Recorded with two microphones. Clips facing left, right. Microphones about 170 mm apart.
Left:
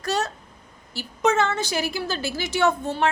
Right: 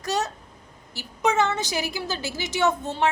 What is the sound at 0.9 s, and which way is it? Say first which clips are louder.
A woman's voice: left 1 dB; 15° right (ahead or behind).